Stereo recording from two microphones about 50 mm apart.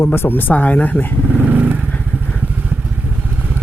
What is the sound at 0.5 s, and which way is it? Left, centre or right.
Speech, left.